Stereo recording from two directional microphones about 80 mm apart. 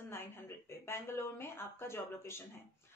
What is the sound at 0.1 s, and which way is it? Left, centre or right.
A woman's voice, left.